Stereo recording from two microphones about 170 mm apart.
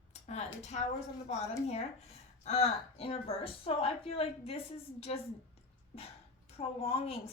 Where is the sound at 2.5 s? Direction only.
35° left (ahead or behind).